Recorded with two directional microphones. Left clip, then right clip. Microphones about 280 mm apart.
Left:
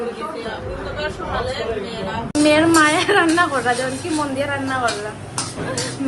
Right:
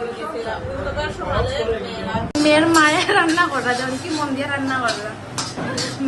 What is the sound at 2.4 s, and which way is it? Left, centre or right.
Speech, centre.